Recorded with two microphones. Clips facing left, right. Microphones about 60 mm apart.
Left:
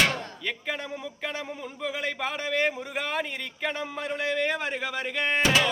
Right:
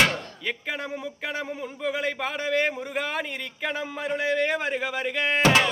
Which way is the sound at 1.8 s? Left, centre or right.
Centre.